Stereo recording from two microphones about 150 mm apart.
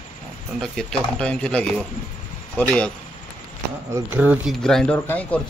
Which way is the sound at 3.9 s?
10° right (ahead or behind).